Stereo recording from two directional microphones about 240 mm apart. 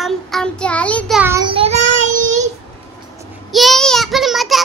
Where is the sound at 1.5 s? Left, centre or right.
Right.